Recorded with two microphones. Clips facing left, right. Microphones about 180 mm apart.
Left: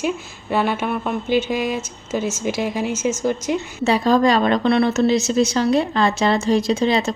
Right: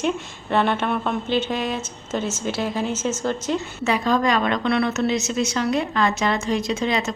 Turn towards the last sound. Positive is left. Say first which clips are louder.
# left 5 dB
turn(degrees=30)  # may be behind; listen again after turning